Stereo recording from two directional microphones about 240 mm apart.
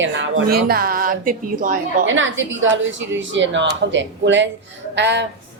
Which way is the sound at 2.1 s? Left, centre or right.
Right.